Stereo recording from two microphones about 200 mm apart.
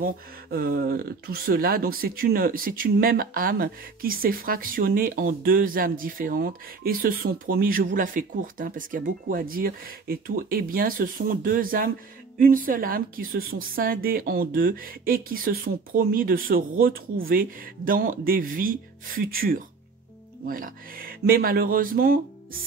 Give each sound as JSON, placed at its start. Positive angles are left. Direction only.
{"t": 0.0, "sound": "speech", "side_deg": -50}